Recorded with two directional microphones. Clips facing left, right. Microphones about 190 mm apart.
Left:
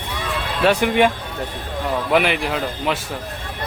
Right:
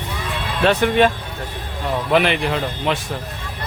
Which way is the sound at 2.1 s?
5° left (ahead or behind).